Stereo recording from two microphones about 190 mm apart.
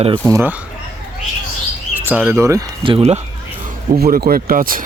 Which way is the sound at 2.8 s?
30° right (ahead or behind).